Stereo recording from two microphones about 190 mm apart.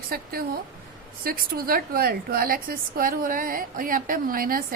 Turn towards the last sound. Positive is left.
turn(degrees=-50)  # may be behind; listen again after turning